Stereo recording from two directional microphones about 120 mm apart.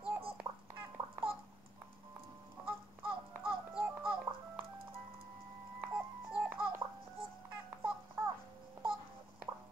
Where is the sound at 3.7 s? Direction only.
5° right (ahead or behind).